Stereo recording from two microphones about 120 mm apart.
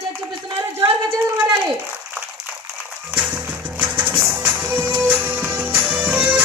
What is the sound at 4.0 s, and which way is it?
Music, 10° right (ahead or behind).